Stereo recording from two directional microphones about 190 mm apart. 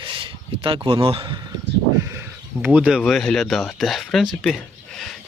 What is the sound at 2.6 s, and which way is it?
Speech, 5° right (ahead or behind).